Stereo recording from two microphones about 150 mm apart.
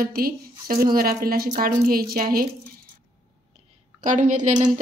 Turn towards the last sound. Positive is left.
turn(degrees=-55)  # may be behind; listen again after turning